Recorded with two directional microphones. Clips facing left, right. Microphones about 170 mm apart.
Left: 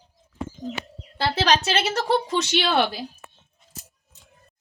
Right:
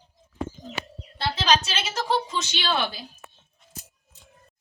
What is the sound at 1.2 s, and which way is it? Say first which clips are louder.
A woman's voice: left 2 dB; 70° left (ahead or behind).